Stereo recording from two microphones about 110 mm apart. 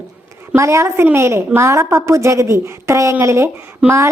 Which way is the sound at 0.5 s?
25° right (ahead or behind).